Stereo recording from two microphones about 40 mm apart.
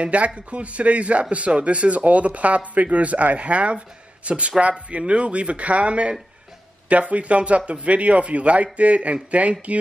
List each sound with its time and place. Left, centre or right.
0.0 s speech: right